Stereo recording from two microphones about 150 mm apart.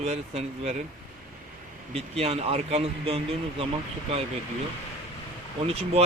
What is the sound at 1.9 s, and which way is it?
Speech, 40° right (ahead or behind).